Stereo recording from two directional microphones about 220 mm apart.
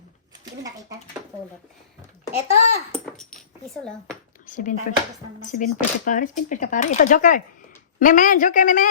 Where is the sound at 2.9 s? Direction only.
Centre (ahead or behind).